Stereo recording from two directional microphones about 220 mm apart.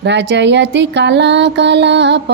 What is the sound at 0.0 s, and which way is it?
Speech, 55° right (ahead or behind).